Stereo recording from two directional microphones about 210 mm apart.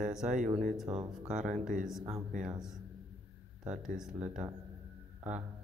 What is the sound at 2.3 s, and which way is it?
Speech, 35° right (ahead or behind).